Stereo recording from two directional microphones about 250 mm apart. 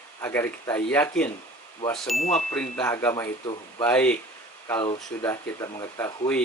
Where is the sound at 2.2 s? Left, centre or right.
Left.